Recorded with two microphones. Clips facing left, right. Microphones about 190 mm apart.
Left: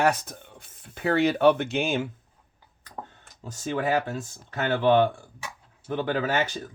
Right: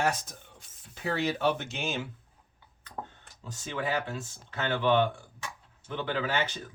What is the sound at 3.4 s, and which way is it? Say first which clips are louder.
Speech: left 6 dB; 45° left (ahead or behind).